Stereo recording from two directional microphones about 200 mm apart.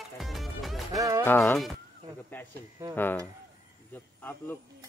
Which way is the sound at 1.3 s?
10° left (ahead or behind).